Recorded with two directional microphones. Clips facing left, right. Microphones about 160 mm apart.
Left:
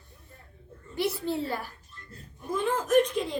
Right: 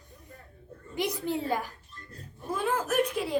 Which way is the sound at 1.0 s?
15° right (ahead or behind).